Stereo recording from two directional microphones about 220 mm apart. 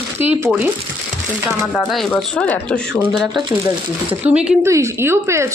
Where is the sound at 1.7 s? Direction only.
Centre (ahead or behind).